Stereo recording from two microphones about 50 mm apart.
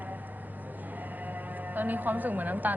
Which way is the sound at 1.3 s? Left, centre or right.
Right.